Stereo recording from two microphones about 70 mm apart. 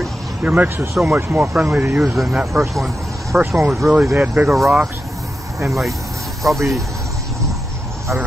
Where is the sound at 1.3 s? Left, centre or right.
Right.